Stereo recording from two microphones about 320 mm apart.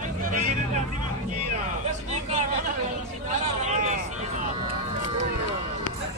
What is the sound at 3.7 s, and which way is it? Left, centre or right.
Vehicle, right.